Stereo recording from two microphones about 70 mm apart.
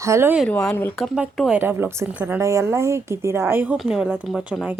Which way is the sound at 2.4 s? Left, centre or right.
Right.